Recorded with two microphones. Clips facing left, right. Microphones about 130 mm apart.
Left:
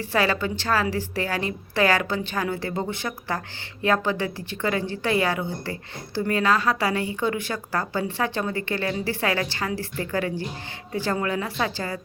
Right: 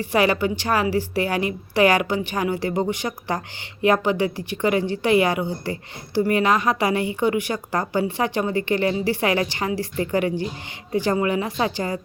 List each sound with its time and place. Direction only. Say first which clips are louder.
0.0 s a woman's voice: right 4 dB; 15° right (ahead or behind)